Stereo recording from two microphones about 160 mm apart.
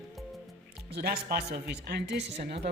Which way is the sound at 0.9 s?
75° right (ahead or behind).